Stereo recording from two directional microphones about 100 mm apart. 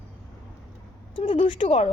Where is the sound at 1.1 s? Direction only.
60° left (ahead or behind); by 1.9 s 75° left (ahead or behind).